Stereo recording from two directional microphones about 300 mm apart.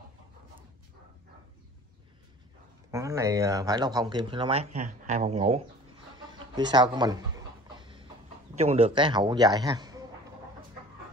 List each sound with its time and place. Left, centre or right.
2.9 s speech: centre
6.7 s speech: centre
7.7 s train: centre
8.5 s speech: centre